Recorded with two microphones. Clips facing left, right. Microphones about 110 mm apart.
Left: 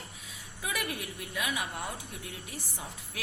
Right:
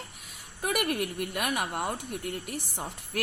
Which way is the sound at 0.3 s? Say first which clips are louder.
Right 7 dB; 70° right (ahead or behind).